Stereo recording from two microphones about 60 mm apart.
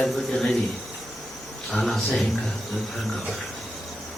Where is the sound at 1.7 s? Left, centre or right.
Centre.